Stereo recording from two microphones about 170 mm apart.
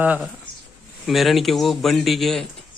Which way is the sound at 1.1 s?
Centre (ahead or behind).